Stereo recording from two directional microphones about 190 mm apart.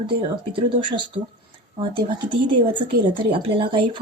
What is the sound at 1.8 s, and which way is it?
A woman's voice, 25° right (ahead or behind).